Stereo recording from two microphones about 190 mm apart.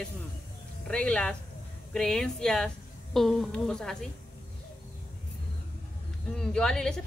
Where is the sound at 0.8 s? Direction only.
5° left (ahead or behind).